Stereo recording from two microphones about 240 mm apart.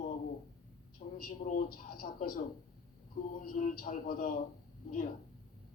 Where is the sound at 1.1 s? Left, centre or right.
Left.